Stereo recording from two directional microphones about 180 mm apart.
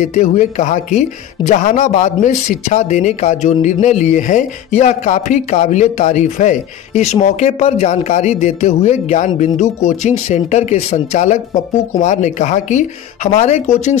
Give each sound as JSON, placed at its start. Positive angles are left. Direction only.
{"t": 0.0, "sound": "speech", "side_deg": 45}